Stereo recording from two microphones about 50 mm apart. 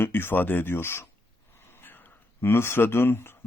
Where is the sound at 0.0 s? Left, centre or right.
Left.